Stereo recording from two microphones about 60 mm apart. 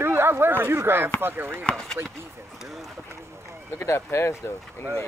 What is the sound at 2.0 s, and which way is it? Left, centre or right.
Speech, right.